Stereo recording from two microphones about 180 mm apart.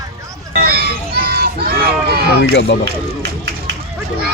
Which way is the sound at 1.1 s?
60° right (ahead or behind).